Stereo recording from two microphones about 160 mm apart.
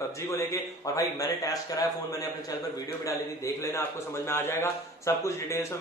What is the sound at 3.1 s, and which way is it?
A man's voice, 20° left (ahead or behind).